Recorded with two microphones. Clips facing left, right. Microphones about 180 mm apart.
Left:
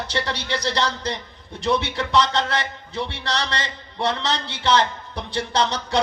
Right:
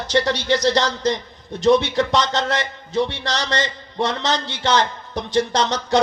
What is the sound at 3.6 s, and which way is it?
Speech, 30° left (ahead or behind).